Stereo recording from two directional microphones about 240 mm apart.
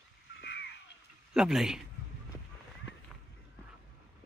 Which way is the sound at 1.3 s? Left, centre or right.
Centre.